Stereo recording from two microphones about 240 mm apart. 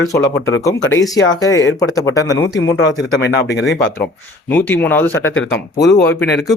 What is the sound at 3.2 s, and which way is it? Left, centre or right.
Speech, left.